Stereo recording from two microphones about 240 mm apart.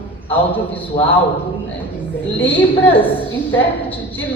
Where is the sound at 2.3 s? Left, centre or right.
Centre.